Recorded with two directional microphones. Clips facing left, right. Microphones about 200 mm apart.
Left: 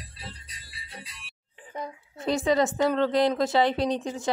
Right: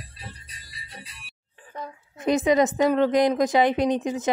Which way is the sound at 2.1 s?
15° right (ahead or behind).